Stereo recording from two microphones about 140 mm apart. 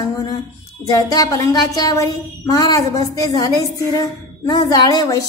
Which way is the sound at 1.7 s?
25° left (ahead or behind).